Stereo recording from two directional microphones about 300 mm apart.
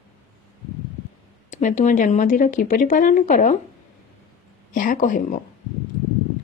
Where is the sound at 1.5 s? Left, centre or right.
Left.